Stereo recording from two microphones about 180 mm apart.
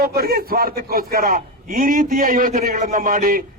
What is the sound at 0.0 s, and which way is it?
A man's voice, 55° right (ahead or behind).